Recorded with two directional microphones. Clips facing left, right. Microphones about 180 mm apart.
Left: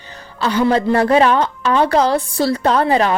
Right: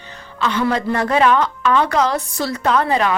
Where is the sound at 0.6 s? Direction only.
30° left (ahead or behind).